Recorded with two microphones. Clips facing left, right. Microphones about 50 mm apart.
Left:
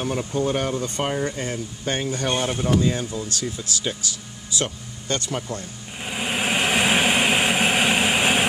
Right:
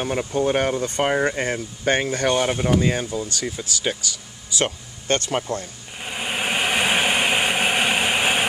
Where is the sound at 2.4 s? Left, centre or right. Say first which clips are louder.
Right 2 dB; right.